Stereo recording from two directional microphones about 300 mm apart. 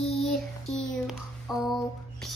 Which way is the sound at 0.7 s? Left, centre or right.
Centre.